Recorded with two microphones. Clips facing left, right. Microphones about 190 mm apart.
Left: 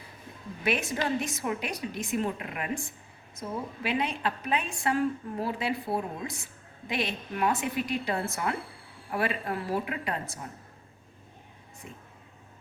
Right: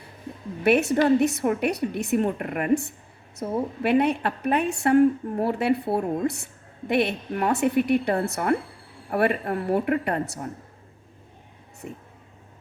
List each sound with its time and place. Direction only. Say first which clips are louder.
0.6 s a woman's voice: right 10 dB; 65° right (ahead or behind)
11.8 s a woman's voice: right 9 dB; 55° right (ahead or behind)